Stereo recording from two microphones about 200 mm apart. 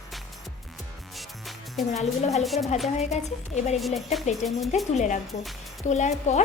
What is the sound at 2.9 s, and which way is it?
Speech, 35° left (ahead or behind).